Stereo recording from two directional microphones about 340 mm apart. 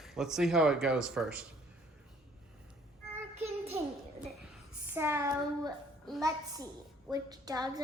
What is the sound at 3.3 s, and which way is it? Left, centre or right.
Child singing, centre.